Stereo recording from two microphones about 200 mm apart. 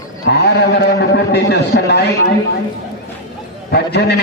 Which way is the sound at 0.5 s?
55° left (ahead or behind).